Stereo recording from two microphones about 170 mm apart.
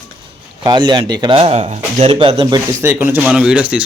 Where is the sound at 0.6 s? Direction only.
25° right (ahead or behind).